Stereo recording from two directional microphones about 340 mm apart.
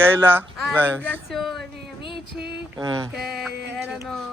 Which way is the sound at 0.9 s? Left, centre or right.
Centre.